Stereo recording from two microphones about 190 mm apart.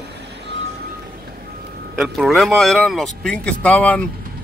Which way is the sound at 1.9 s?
Centre (ahead or behind).